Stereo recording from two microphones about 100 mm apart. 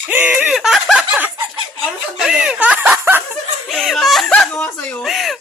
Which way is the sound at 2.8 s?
20° right (ahead or behind).